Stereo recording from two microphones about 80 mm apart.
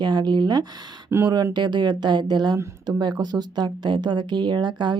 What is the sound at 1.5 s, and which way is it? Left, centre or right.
A woman's voice, right.